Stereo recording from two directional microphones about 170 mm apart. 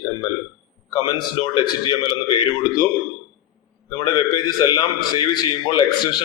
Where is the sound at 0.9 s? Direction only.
25° left (ahead or behind).